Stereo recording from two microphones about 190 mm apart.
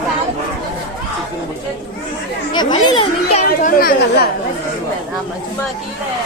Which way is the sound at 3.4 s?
50° left (ahead or behind).